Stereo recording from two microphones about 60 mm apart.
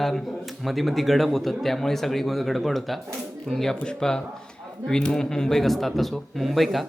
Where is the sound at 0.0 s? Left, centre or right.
Centre.